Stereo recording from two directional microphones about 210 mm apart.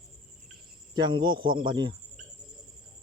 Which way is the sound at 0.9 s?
20° right (ahead or behind).